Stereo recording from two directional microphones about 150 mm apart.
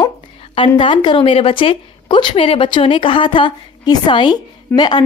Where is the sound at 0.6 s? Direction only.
35° left (ahead or behind).